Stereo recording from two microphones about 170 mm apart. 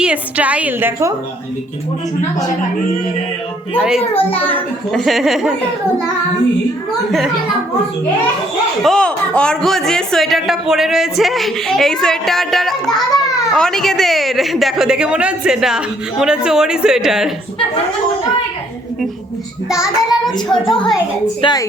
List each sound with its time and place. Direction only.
0.0 s a woman's voice: 5° right (ahead or behind)
3.8 s speech: 5° right (ahead or behind)
8.8 s speech: 5° left (ahead or behind)
19.7 s speech: centre (ahead or behind)
21.4 s a woman's voice: 20° left (ahead or behind)